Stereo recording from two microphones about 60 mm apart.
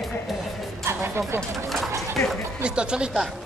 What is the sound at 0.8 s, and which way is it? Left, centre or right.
Music, right.